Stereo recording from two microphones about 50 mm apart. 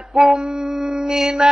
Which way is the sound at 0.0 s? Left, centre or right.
Centre.